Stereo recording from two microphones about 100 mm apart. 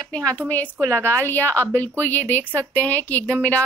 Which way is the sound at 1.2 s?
20° left (ahead or behind).